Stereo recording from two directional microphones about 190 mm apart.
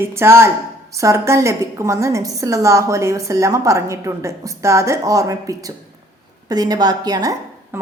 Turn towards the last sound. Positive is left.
turn(degrees=-20)  # may be behind; listen again after turning